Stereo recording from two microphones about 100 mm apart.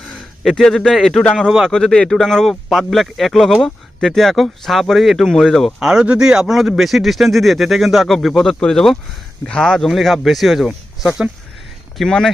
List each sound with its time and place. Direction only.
0.1 s a man's voice: centre (ahead or behind)
5.8 s speech: 5° right (ahead or behind)